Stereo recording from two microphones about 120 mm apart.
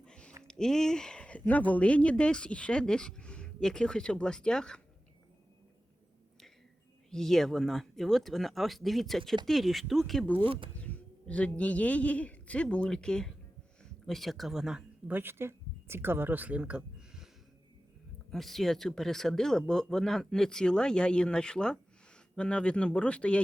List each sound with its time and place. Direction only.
0.0 s a sound: 10° left (ahead or behind)
0.4 s speech: 5° left (ahead or behind)
7.1 s a man's voice: 5° left (ahead or behind)
18.3 s speech: centre (ahead or behind)